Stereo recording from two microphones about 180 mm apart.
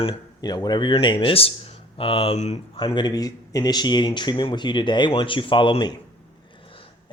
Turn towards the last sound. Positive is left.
turn(degrees=25)  # may be behind; listen again after turning